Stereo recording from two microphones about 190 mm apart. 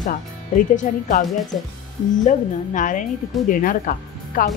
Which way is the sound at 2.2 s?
40° left (ahead or behind).